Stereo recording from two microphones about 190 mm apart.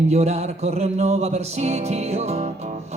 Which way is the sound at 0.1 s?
35° right (ahead or behind).